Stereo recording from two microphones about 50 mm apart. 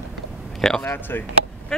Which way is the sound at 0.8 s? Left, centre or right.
Left.